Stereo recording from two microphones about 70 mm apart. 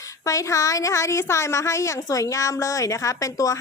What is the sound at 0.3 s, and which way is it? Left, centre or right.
A woman's voice, left.